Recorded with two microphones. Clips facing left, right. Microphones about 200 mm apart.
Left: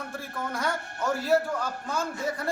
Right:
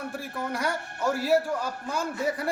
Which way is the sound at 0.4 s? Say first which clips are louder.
Right 1 dB; 15° right (ahead or behind).